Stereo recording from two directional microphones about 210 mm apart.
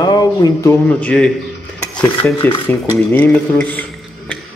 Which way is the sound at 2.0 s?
5° left (ahead or behind).